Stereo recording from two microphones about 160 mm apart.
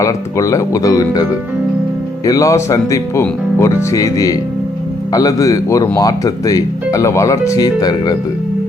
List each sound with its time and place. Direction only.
0.0 s speech: 20° left (ahead or behind)
2.2 s speech: 20° left (ahead or behind)